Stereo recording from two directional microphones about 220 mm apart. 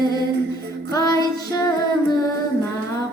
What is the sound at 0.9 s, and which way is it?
Music, 15° left (ahead or behind).